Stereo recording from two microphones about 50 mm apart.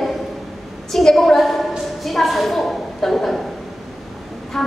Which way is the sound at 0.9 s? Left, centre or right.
Centre.